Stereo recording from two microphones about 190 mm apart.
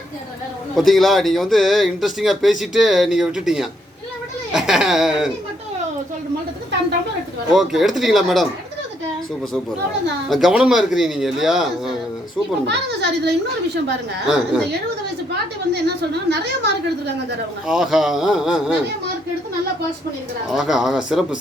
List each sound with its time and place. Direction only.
0.8 s speech: centre (ahead or behind)
7.5 s speech: centre (ahead or behind)
10.2 s speech: centre (ahead or behind)
12.6 s a woman's voice: 65° right (ahead or behind)
15.7 s a woman's voice: 60° right (ahead or behind)
17.7 s speech: centre (ahead or behind)
20.5 s speech: 5° right (ahead or behind)